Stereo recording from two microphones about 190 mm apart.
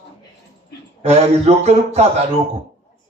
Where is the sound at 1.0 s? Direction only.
35° right (ahead or behind).